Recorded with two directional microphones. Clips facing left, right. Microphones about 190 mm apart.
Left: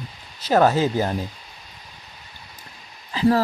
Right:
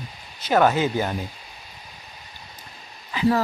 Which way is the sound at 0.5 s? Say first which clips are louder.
Left 1 dB; 35° left (ahead or behind).